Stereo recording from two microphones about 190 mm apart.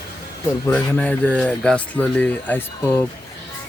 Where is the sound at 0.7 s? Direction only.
10° left (ahead or behind).